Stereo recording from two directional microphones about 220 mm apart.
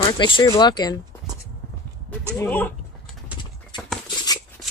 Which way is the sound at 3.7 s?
20° left (ahead or behind).